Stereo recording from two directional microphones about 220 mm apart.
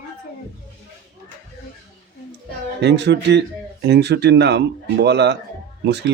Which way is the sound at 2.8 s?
50° right (ahead or behind).